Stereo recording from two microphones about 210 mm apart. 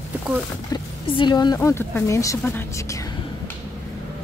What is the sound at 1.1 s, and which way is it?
A woman's voice, 20° left (ahead or behind).